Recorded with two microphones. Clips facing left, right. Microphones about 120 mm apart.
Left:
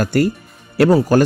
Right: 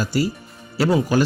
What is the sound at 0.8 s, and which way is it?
Speech, 45° left (ahead or behind).